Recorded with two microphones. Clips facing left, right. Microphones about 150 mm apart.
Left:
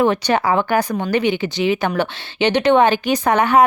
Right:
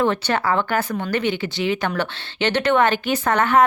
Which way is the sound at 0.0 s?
15° left (ahead or behind).